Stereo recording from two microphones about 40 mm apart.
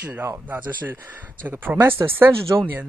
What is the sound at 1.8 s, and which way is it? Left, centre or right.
Speech, right.